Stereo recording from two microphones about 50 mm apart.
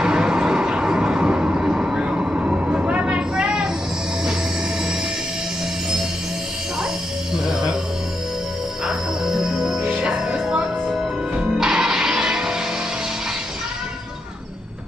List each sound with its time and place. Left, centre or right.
0.0 s vehicle: centre
8.8 s music: centre